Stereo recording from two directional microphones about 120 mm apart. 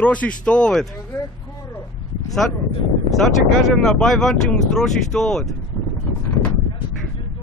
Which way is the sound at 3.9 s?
5° left (ahead or behind).